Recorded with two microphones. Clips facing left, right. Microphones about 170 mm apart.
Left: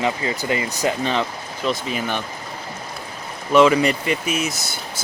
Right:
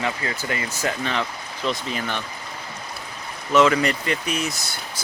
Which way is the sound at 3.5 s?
15° left (ahead or behind).